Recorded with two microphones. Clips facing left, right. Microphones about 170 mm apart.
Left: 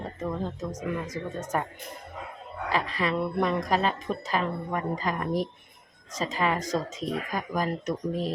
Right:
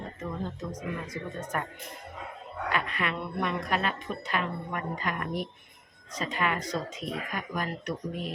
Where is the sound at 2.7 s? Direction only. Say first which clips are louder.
Left 4 dB; 35° left (ahead or behind).